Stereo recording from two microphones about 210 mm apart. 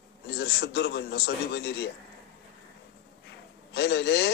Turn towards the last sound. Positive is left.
turn(degrees=55)  # may be behind; listen again after turning